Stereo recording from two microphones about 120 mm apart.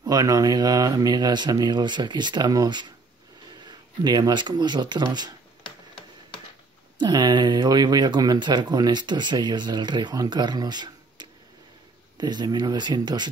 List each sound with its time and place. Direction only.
0.0 s speech: 30° right (ahead or behind)
7.0 s speech: 35° right (ahead or behind)